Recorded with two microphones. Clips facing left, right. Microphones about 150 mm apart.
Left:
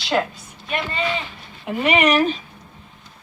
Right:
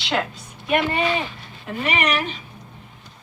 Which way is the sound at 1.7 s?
15° left (ahead or behind).